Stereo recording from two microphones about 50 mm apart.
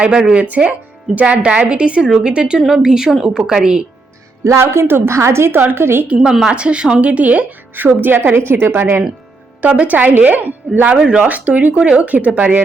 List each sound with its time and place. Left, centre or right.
0.0 s a woman's voice: centre
0.3 s a woman's voice: right; by 3.8 s centre
4.4 s a woman's voice: right
6.5 s speech: right
9.6 s speech: right
10.9 s speech: centre
11.3 s speech: right